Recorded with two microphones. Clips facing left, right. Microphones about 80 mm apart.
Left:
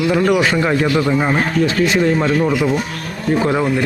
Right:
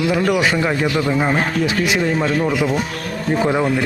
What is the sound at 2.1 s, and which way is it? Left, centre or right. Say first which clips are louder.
Speech: left 2 dB; centre.